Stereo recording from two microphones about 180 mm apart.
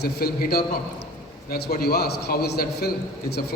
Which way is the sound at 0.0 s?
60° left (ahead or behind).